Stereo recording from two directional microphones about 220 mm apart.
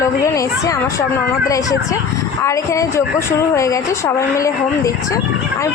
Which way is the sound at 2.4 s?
15° left (ahead or behind).